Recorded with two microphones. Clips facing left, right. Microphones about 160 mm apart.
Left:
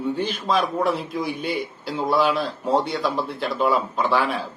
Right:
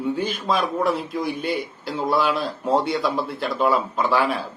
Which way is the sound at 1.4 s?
50° right (ahead or behind).